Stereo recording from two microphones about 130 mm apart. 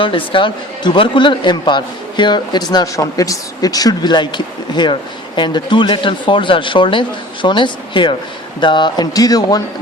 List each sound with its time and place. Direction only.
0.0 s speech: 40° left (ahead or behind)